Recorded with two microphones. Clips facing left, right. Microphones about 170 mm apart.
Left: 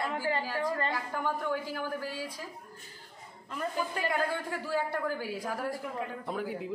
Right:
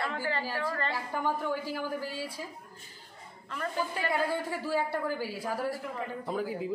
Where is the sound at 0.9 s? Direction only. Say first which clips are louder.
Right 1 dB; 10° right (ahead or behind).